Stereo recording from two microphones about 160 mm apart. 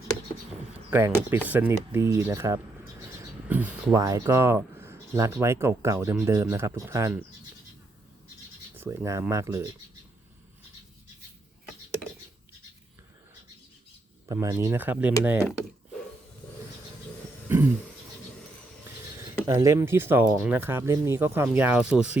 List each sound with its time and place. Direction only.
0.9 s speech: 15° right (ahead or behind)
3.9 s speech: 20° right (ahead or behind)
8.8 s speech: 20° right (ahead or behind)
14.3 s speech: 15° right (ahead or behind)
17.5 s a sound: 10° right (ahead or behind)
19.5 s speech: 20° right (ahead or behind)